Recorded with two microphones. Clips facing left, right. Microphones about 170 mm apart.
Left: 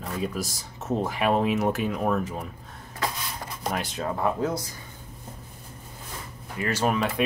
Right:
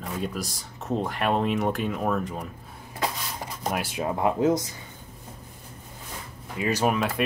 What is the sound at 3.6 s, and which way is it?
Speech, 5° right (ahead or behind).